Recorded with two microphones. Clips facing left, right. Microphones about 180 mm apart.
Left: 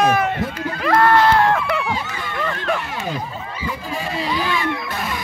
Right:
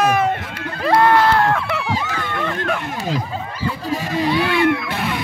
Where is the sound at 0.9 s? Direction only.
15° right (ahead or behind).